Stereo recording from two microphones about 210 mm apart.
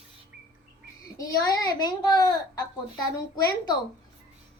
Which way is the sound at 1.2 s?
15° left (ahead or behind).